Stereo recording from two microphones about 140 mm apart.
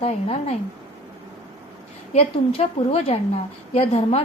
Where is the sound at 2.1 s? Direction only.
45° left (ahead or behind).